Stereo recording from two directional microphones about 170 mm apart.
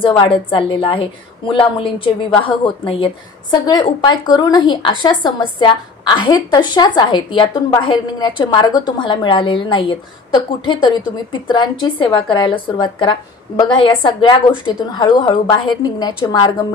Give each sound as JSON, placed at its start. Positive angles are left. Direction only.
{"t": 0.0, "sound": "a woman's voice", "side_deg": 30}